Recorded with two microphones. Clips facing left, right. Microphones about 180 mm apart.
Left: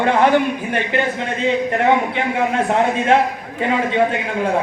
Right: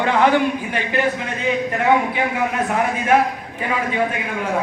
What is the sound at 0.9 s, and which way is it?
Speech, 25° left (ahead or behind).